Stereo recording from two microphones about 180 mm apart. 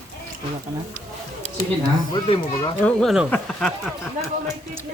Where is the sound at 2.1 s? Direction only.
30° left (ahead or behind).